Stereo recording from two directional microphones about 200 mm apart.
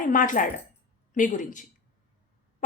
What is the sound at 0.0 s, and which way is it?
A woman's voice, 40° left (ahead or behind).